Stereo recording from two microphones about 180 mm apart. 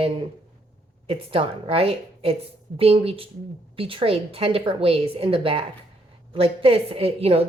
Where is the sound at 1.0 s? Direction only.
30° right (ahead or behind).